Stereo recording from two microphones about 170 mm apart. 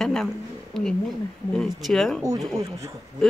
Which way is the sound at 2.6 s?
20° right (ahead or behind).